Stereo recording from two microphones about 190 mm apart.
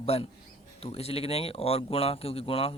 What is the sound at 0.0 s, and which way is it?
Speech, 30° left (ahead or behind).